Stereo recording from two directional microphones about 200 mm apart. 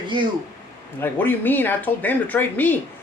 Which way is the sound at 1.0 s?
10° left (ahead or behind).